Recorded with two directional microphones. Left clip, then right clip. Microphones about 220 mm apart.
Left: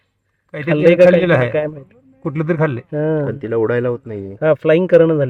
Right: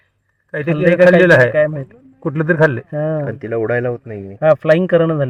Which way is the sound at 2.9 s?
20° left (ahead or behind).